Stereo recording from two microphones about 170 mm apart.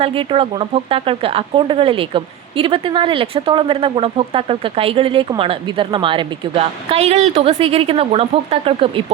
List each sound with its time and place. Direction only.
0.0 s speech: 30° right (ahead or behind)